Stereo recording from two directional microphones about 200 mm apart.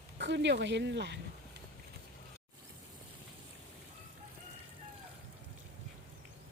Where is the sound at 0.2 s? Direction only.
60° right (ahead or behind).